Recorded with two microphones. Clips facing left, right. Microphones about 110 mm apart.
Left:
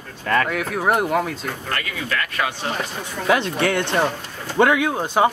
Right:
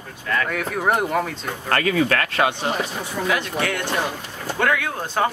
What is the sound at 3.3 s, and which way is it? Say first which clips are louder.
Speech: left 7 dB; 30° left (ahead or behind).